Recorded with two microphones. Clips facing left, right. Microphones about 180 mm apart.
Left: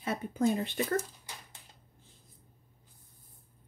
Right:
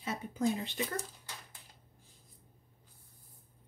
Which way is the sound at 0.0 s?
55° left (ahead or behind).